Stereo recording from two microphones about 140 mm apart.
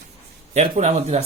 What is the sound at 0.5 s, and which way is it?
Speech, 50° right (ahead or behind).